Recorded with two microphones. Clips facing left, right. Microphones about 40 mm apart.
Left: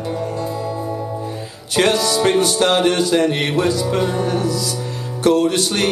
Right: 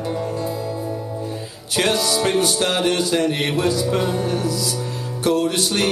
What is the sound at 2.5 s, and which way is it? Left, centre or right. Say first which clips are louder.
Music: left 4 dB; centre.